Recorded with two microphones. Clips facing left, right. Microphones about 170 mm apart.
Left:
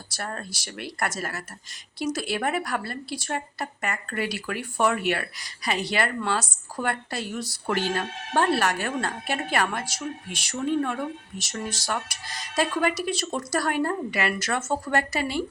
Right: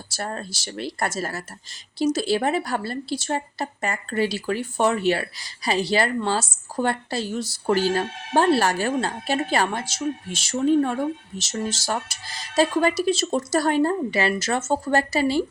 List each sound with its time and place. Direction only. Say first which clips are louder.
0.2 s a woman's voice: right 4 dB; 30° right (ahead or behind)